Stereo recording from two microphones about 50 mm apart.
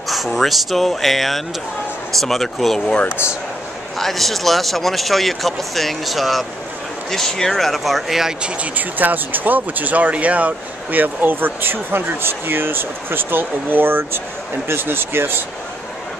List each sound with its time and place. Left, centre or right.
0.1 s speech: centre
4.0 s speech: centre
8.7 s speech: right